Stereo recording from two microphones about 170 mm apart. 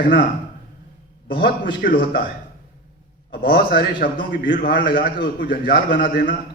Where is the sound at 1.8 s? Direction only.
60° left (ahead or behind).